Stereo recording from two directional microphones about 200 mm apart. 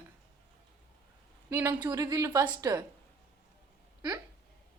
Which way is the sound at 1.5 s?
10° right (ahead or behind).